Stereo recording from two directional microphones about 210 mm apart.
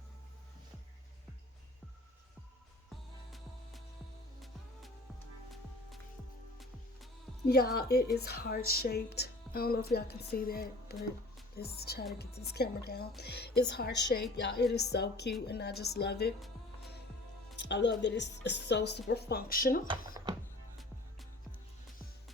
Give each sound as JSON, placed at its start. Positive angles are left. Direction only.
{"t": 3.3, "sound": "music", "side_deg": 0}
{"t": 7.4, "sound": "speech", "side_deg": 45}
{"t": 17.6, "sound": "speech", "side_deg": 55}